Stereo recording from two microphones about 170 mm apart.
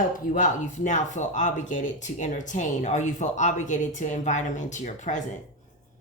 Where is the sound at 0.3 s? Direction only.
50° left (ahead or behind).